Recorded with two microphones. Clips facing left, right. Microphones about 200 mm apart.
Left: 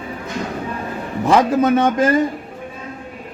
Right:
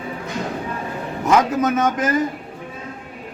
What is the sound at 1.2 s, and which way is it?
Speech, 30° left (ahead or behind).